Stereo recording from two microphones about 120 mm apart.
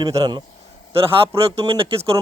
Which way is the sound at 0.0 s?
35° right (ahead or behind).